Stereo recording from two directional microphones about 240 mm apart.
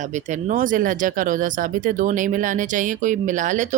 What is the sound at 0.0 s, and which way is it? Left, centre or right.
Speech, right.